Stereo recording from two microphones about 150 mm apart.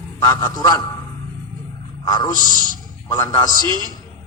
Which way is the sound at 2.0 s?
25° left (ahead or behind).